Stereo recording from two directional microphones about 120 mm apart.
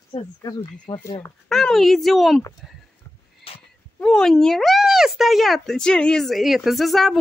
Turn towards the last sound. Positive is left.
turn(degrees=0)  # may be behind; listen again after turning